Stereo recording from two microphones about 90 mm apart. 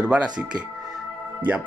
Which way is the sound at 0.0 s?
10° right (ahead or behind).